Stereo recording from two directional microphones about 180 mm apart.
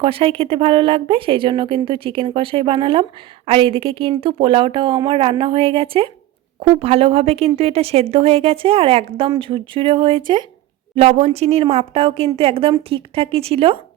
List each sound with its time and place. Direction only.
0.0 s speech: 30° right (ahead or behind)